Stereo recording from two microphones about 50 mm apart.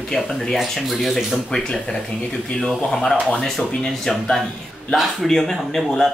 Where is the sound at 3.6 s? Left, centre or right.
Left.